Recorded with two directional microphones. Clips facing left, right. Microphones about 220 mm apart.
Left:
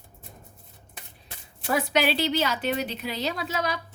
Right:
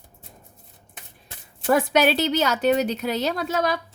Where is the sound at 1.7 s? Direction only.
50° right (ahead or behind).